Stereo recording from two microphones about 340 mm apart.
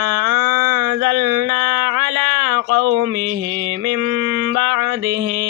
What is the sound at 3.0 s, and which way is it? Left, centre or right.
Mantra, right.